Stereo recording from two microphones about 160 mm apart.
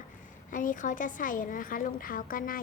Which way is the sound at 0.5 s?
55° left (ahead or behind).